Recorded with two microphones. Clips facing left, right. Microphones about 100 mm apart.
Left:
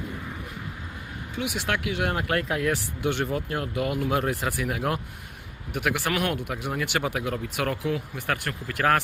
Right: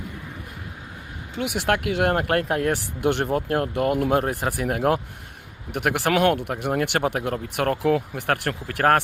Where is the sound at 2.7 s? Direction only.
65° right (ahead or behind).